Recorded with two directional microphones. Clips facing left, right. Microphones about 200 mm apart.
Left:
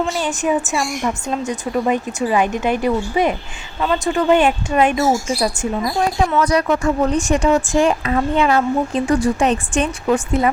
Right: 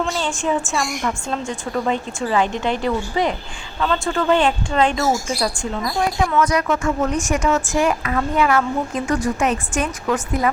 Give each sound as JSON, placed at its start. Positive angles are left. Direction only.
{"t": 0.3, "sound": "speech", "side_deg": 20}
{"t": 6.4, "sound": "speech", "side_deg": 35}